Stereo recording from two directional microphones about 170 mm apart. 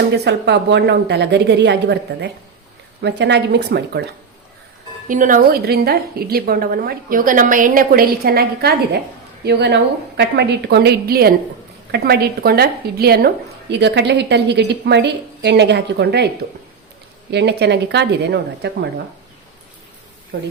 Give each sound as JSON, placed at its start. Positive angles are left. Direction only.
{"t": 0.1, "sound": "a woman's voice", "side_deg": -85}
{"t": 3.0, "sound": "a woman's voice", "side_deg": -90}
{"t": 5.0, "sound": "a woman's voice", "side_deg": -50}
{"t": 9.4, "sound": "a woman's voice", "side_deg": -80}
{"t": 17.3, "sound": "a woman's voice", "side_deg": -85}
{"t": 20.3, "sound": "a woman's voice", "side_deg": -70}